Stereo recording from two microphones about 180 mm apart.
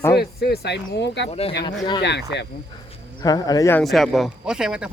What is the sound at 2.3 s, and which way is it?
Speech, 70° left (ahead or behind).